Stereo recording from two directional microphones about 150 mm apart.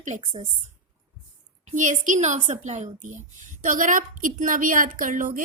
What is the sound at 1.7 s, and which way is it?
A woman's voice, 55° right (ahead or behind).